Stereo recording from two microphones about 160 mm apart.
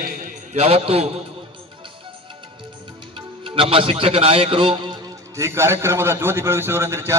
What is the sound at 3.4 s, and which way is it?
A man's voice, 35° right (ahead or behind).